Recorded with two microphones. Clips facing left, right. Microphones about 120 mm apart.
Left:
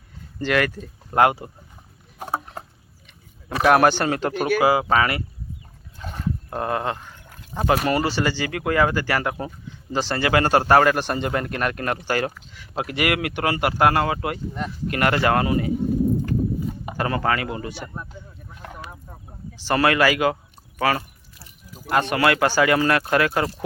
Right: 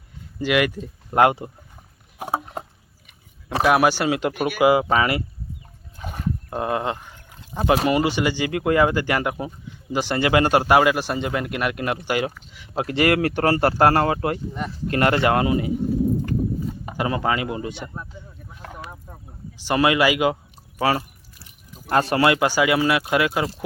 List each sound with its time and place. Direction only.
0.3 s speech: 10° right (ahead or behind)
2.1 s rowboat: 10° right (ahead or behind)
3.6 s speech: 5° right (ahead or behind)
4.7 s speech: 20° right (ahead or behind)
6.0 s a sound: 10° right (ahead or behind)
7.6 s speech: 15° right (ahead or behind)
12.7 s speech: 30° right (ahead or behind)
17.0 s speech: 15° right (ahead or behind)
18.6 s a sound: 5° right (ahead or behind)
20.7 s speech: 25° right (ahead or behind)
21.3 s a sound: 5° left (ahead or behind)
21.8 s speech: 35° right (ahead or behind)
22.2 s speech: 15° right (ahead or behind)